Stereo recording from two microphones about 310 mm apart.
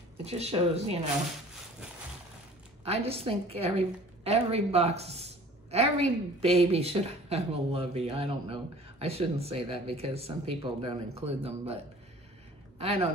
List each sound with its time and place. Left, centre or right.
0.2 s a woman's voice: centre
2.8 s a woman's voice: centre